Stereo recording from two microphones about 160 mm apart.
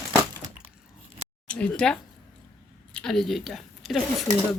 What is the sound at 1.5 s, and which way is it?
A woman's voice, 5° left (ahead or behind).